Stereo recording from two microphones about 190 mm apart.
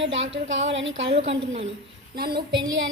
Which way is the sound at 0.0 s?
75° right (ahead or behind).